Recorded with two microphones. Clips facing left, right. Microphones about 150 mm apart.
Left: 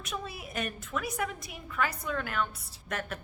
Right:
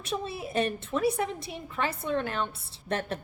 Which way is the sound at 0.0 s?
30° right (ahead or behind).